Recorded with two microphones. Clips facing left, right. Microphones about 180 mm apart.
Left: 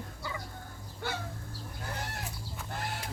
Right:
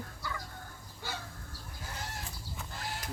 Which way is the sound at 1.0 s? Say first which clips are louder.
Left 5 dB; 60° left (ahead or behind).